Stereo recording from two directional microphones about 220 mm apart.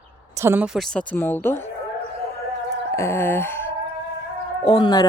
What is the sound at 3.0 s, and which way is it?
Chicken, 10° left (ahead or behind).